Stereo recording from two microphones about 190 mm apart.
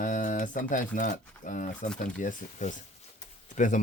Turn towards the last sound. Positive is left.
turn(degrees=40)  # may be behind; listen again after turning